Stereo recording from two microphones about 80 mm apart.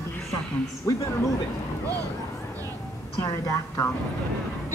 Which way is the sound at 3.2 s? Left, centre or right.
Left.